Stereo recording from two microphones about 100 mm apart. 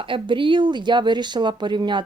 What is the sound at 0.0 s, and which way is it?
Speech, 55° right (ahead or behind).